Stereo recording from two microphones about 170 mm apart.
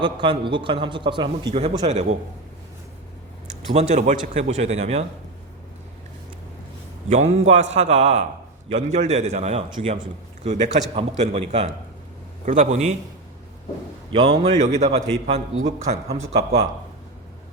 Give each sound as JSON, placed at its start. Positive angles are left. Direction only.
{"t": 0.0, "sound": "a man's voice", "side_deg": -30}
{"t": 3.8, "sound": "a man's voice", "side_deg": -40}
{"t": 7.1, "sound": "a man's voice", "side_deg": -40}
{"t": 10.4, "sound": "a man's voice", "side_deg": -45}
{"t": 14.1, "sound": "a man's voice", "side_deg": -30}
{"t": 14.9, "sound": "a man's voice", "side_deg": -40}